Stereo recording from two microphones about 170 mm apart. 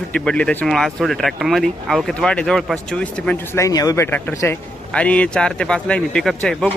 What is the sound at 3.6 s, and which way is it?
A man's voice, 20° left (ahead or behind).